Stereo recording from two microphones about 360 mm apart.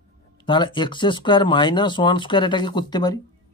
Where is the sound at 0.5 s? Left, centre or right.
Centre.